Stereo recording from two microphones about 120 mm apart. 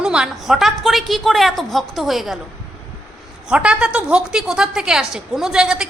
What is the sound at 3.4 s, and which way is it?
A woman's voice, 5° right (ahead or behind).